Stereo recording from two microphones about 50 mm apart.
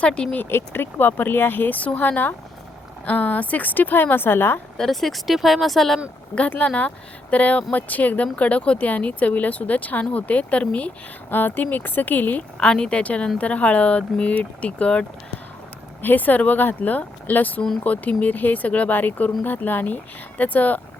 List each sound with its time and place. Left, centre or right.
0.0 s speech: left
0.5 s speech: left
4.8 s speech: centre
6.7 s speech: left
11.3 s speech: left
12.5 s speech: centre
16.0 s speech: left